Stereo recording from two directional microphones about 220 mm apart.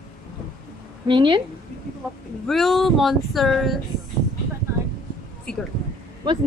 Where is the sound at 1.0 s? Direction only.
20° right (ahead or behind).